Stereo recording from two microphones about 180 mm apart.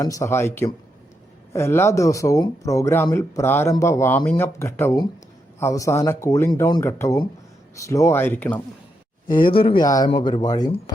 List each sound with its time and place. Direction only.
0.0 s speech: 15° left (ahead or behind)
9.5 s speech: 30° left (ahead or behind)